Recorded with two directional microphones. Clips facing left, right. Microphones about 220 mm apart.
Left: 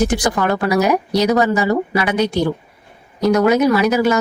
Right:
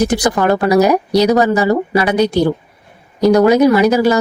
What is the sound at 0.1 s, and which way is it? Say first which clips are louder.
Speech: right 4 dB; 35° right (ahead or behind).